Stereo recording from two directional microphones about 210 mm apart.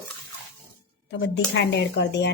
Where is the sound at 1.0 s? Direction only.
55° left (ahead or behind).